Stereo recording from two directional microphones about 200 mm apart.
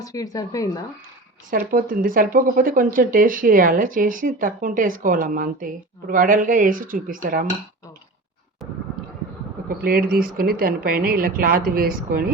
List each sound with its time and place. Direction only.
0.0 s speech: 15° left (ahead or behind)
1.5 s speech: 45° right (ahead or behind)
9.6 s speech: 50° right (ahead or behind)